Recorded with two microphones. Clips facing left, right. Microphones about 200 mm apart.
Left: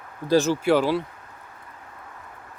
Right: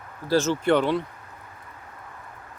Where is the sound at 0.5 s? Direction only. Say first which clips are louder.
Left 1 dB; 5° left (ahead or behind).